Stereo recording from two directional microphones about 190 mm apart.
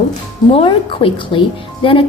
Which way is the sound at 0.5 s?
30° left (ahead or behind).